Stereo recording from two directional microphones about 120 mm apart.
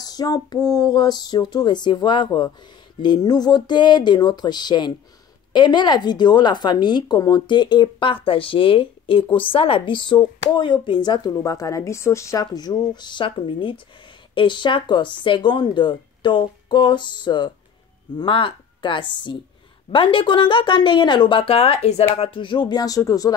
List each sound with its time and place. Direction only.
0.0 s speech: 30° left (ahead or behind)